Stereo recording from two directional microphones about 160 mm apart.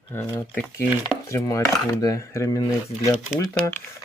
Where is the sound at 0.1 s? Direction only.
20° left (ahead or behind).